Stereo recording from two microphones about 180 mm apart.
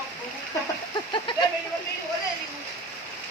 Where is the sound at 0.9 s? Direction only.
25° left (ahead or behind).